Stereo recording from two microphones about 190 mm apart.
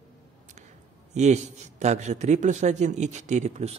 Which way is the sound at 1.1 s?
35° right (ahead or behind).